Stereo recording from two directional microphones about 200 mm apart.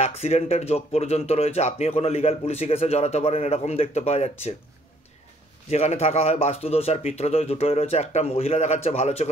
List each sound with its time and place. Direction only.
0.2 s speech: 30° left (ahead or behind)
5.7 s speech: 30° left (ahead or behind)